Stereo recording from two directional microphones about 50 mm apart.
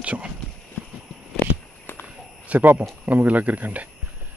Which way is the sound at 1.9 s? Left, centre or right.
Left.